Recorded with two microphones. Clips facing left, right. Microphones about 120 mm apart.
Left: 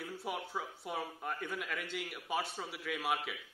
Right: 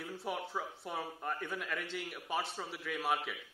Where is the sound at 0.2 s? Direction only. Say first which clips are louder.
Right 2 dB; centre (ahead or behind).